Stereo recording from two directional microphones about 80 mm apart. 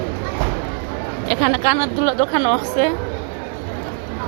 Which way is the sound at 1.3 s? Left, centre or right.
Left.